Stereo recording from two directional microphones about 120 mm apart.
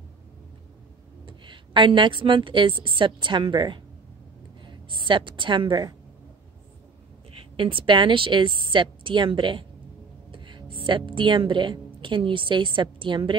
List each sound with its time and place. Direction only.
1.2 s a woman's voice: 40° right (ahead or behind)
5.0 s a woman's voice: 45° right (ahead or behind)
7.5 s a woman's voice: 45° right (ahead or behind)